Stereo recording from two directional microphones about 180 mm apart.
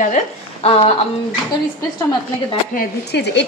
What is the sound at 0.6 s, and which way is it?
Speech, 35° left (ahead or behind).